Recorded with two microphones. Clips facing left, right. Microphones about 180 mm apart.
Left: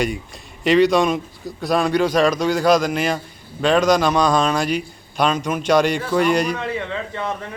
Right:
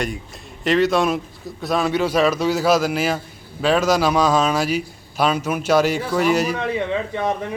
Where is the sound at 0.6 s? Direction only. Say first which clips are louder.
Left 2 dB; centre (ahead or behind).